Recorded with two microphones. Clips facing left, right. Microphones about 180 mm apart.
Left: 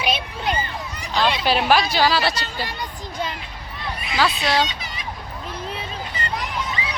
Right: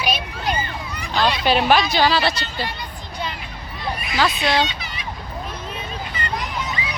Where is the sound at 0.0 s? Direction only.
25° left (ahead or behind).